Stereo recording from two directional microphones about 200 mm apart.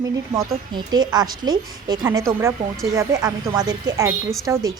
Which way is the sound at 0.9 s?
20° right (ahead or behind).